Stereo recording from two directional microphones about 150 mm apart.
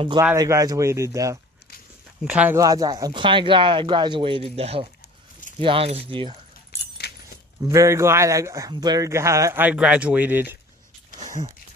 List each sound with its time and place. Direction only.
0.4 s speech: 25° right (ahead or behind)
2.2 s speech: 10° right (ahead or behind)
2.5 s speech: 25° right (ahead or behind)
7.0 s keys jangling: 90° left
7.6 s speech: 20° right (ahead or behind)